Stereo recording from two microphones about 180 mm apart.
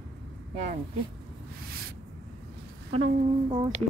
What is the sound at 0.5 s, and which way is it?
Speech, 40° right (ahead or behind).